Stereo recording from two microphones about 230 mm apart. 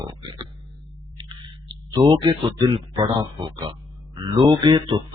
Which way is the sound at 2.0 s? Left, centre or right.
Centre.